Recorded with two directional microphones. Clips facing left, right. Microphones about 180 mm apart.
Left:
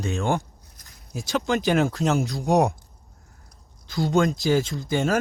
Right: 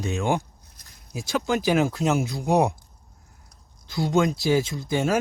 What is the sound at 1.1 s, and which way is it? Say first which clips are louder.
Speech: left 1 dB; centre (ahead or behind).